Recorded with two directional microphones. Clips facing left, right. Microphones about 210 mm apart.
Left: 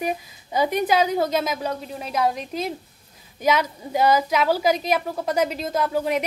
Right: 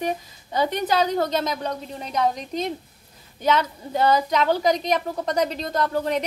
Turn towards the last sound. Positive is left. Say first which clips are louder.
# left 1 dB
turn(degrees=10)  # may be behind; listen again after turning